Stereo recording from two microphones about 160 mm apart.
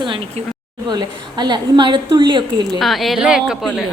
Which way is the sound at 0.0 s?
30° right (ahead or behind).